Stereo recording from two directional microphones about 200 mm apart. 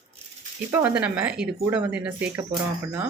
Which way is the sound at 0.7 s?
5° right (ahead or behind).